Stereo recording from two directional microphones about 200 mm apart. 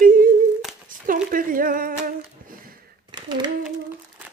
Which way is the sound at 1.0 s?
45° right (ahead or behind).